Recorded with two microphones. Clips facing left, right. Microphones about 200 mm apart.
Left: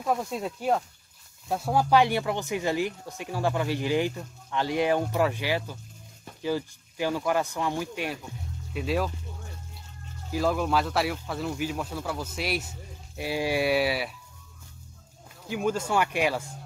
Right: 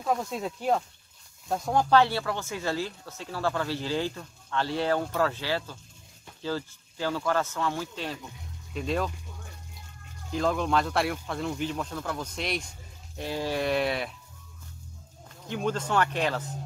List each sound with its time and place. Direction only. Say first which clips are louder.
0.0 s speech: left 1 dB; 5° left (ahead or behind)
10.3 s speech: left 1 dB; 5° left (ahead or behind)
15.4 s speech: left 2 dB; 5° left (ahead or behind)